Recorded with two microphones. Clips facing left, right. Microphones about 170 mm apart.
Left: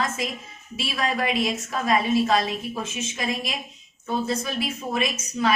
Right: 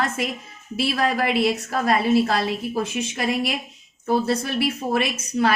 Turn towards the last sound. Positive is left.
turn(degrees=-70)  # may be behind; listen again after turning